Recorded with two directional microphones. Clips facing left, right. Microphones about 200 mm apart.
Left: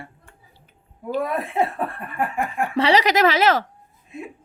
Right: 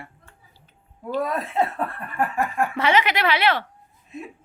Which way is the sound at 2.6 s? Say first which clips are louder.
Left 4 dB; 30° left (ahead or behind).